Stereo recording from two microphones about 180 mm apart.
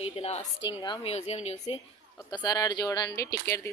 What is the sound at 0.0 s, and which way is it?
A woman's voice, 35° left (ahead or behind).